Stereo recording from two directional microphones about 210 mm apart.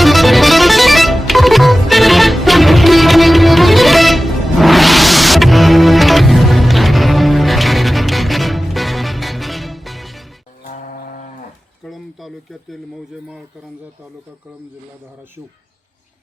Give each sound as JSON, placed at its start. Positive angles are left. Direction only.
{"t": 0.0, "sound": "music", "side_deg": 0}
{"t": 10.7, "sound": "livestock", "side_deg": 40}
{"t": 11.9, "sound": "a sound", "side_deg": 0}